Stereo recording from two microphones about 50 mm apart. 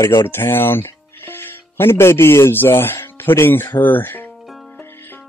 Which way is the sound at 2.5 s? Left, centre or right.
Left.